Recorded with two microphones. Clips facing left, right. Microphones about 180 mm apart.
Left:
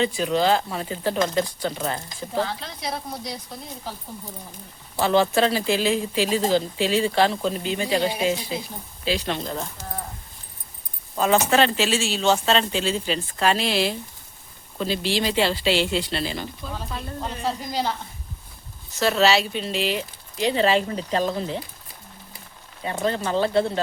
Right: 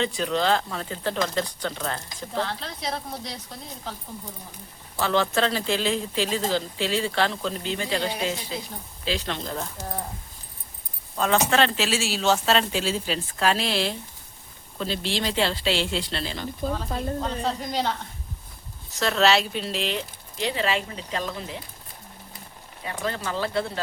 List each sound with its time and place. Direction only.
0.0 s speech: 5° left (ahead or behind)
5.0 s speech: 15° left (ahead or behind)
9.4 s speech: centre (ahead or behind)
11.2 s speech: 5° left (ahead or behind)
16.9 s a woman's voice: 45° right (ahead or behind)
17.4 s speech: 5° left (ahead or behind)
20.5 s speech: 35° left (ahead or behind)
22.8 s speech: 30° left (ahead or behind)